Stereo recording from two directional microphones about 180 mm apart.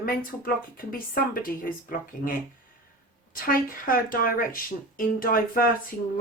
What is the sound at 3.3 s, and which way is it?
Speech, 50° left (ahead or behind).